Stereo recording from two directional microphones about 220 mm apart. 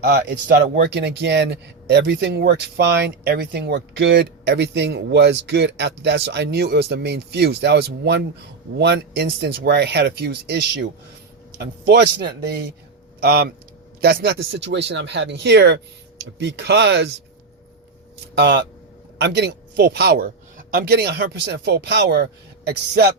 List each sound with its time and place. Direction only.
0.0 s speech: 50° right (ahead or behind)
18.3 s speech: 50° right (ahead or behind)